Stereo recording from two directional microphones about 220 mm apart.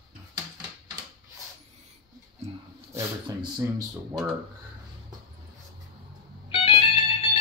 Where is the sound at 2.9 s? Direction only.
15° right (ahead or behind).